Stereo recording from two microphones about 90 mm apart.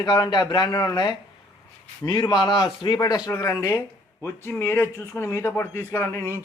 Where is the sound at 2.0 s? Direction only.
55° left (ahead or behind).